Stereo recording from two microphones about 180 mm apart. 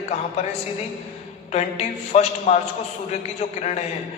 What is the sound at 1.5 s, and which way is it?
A man's voice, 40° left (ahead or behind).